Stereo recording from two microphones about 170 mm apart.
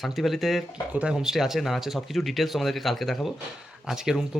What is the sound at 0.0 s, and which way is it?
Speech, centre (ahead or behind).